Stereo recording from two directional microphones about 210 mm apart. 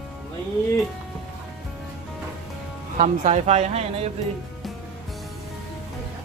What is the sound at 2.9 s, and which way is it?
Speech, 35° right (ahead or behind).